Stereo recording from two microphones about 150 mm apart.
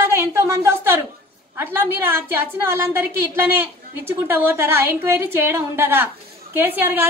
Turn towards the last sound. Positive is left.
turn(degrees=-10)  # may be behind; listen again after turning